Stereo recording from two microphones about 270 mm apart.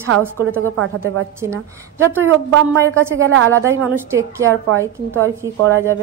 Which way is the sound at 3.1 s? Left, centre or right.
Right.